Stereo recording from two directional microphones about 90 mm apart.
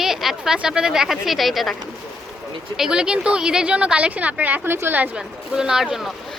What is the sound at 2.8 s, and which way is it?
A woman's voice, 10° right (ahead or behind).